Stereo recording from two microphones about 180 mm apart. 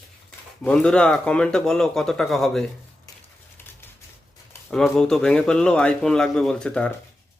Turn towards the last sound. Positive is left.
turn(degrees=5)  # may be behind; listen again after turning